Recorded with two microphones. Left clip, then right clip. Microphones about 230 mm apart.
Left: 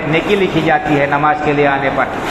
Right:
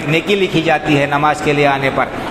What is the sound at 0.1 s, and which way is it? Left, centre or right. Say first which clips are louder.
A man's voice: even; right.